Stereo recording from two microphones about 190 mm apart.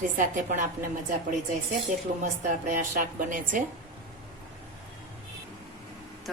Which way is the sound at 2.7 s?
45° right (ahead or behind).